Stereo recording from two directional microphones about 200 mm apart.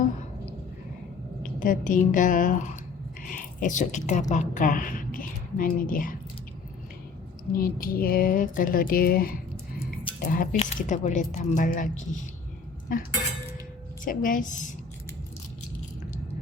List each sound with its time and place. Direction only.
1.4 s a woman's voice: 45° left (ahead or behind)
7.5 s a woman's voice: 45° left (ahead or behind)